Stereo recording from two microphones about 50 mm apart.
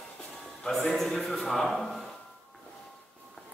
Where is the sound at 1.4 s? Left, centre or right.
Centre.